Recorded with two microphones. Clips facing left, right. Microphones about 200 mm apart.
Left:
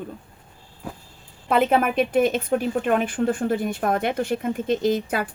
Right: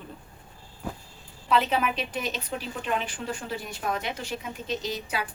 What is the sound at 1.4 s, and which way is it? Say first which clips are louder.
A woman's voice: left 5 dB; 50° left (ahead or behind).